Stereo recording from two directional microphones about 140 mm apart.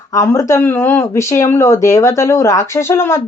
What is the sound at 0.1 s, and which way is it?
Speech, 25° left (ahead or behind).